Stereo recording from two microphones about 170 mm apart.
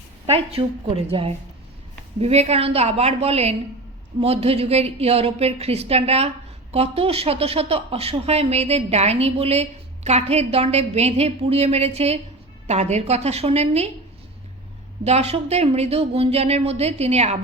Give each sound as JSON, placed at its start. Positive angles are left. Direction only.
{"t": 0.3, "sound": "a woman's voice", "side_deg": -35}
{"t": 15.0, "sound": "a woman's voice", "side_deg": -40}